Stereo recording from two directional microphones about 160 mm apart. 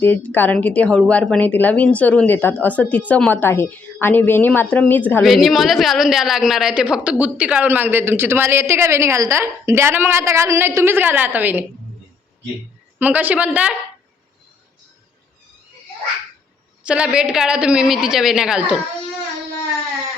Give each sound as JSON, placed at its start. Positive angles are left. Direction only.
{"t": 0.0, "sound": "speech", "side_deg": 10}
{"t": 5.2, "sound": "a woman's voice", "side_deg": 0}
{"t": 13.0, "sound": "a woman's voice", "side_deg": -10}
{"t": 16.8, "sound": "a woman's voice", "side_deg": -5}